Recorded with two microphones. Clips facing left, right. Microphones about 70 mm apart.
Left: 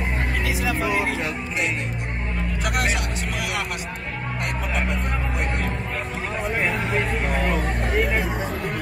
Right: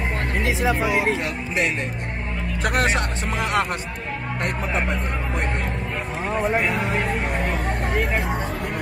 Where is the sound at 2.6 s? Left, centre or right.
Right.